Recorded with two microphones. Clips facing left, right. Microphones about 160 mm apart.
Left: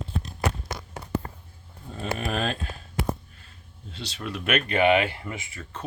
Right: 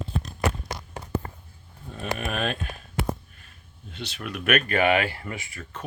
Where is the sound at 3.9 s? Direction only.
30° left (ahead or behind).